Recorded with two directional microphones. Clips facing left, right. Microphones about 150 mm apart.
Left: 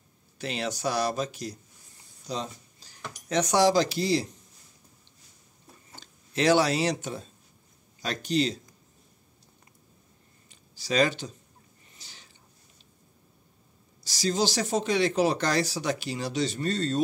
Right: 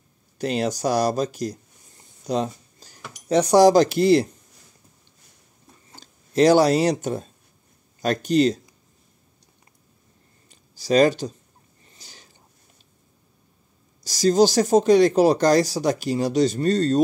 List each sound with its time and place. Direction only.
0.4 s speech: 40° right (ahead or behind)
2.2 s a sound: 55° right (ahead or behind)
3.3 s speech: 35° right (ahead or behind); by 4.3 s 60° right (ahead or behind)
5.9 s speech: 40° right (ahead or behind)
10.5 s a sound: 45° right (ahead or behind)
14.0 s speech: 45° right (ahead or behind)